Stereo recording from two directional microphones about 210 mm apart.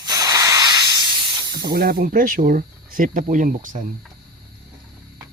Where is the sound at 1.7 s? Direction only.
45° right (ahead or behind).